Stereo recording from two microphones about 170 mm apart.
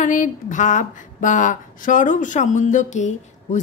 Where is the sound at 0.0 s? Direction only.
50° left (ahead or behind).